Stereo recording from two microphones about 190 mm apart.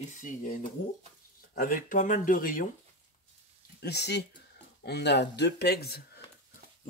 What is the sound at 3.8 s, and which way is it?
Speech, 60° left (ahead or behind).